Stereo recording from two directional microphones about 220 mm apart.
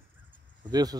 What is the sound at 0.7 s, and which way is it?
Speech, 15° right (ahead or behind).